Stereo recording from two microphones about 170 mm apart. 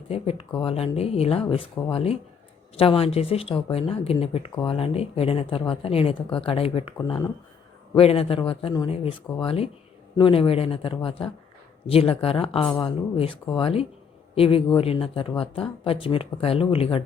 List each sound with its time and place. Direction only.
0.1 s speech: 35° left (ahead or behind)
7.9 s speech: 35° left (ahead or behind)